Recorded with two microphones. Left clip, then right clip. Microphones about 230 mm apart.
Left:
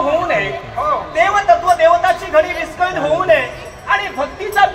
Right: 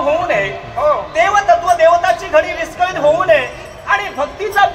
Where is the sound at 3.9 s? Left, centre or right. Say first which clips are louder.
Right 1 dB; right.